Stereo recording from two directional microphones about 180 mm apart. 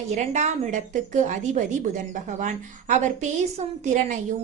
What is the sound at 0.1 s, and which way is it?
A woman's voice, 40° right (ahead or behind).